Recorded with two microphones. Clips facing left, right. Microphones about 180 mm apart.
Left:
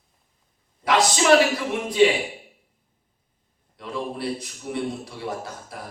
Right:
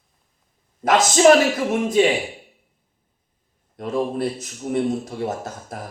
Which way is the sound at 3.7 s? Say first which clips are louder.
Right 7 dB; 45° right (ahead or behind).